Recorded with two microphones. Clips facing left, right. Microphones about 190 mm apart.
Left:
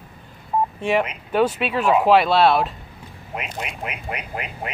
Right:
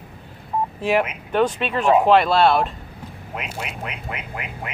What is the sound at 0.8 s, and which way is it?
Speech, 5° right (ahead or behind).